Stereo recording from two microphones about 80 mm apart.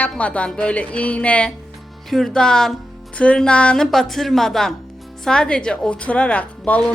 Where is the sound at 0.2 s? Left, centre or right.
Centre.